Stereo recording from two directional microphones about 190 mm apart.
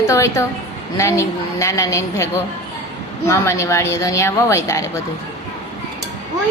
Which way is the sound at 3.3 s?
15° left (ahead or behind).